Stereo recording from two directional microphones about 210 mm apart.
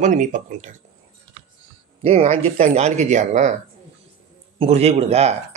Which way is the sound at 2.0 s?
30° right (ahead or behind).